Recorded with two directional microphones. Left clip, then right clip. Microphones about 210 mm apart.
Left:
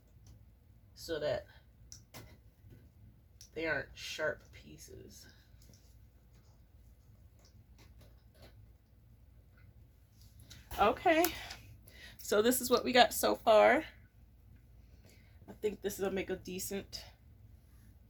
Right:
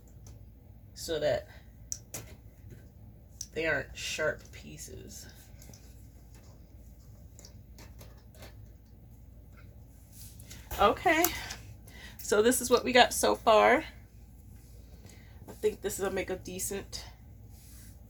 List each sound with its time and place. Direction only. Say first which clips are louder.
1.0 s speech: right 6 dB; 20° left (ahead or behind)
3.5 s speech: right 5 dB; 20° left (ahead or behind)
10.8 s speech: right 3 dB; 30° left (ahead or behind)
15.0 s speech: right 5 dB; 30° left (ahead or behind)